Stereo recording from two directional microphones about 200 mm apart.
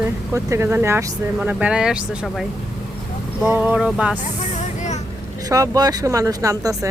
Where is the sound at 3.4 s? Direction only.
10° right (ahead or behind).